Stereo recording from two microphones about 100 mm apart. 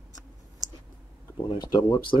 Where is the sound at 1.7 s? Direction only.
50° left (ahead or behind).